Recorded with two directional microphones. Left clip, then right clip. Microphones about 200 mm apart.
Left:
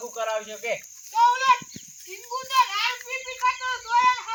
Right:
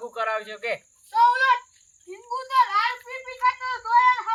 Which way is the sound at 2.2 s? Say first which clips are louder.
Right 1 dB; 15° right (ahead or behind).